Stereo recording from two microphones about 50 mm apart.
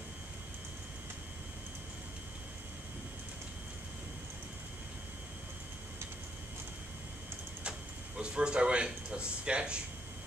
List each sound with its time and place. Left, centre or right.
8.2 s a man's voice: centre